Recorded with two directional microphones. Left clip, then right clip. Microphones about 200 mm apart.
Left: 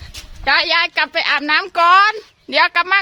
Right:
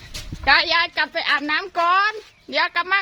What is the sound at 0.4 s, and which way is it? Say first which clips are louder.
A woman's voice: left 2 dB; 30° left (ahead or behind).